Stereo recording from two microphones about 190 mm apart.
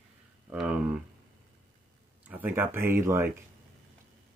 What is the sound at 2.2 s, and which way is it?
Speech, 10° right (ahead or behind).